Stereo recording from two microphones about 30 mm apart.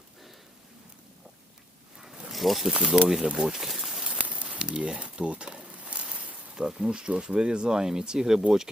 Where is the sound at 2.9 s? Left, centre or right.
Right.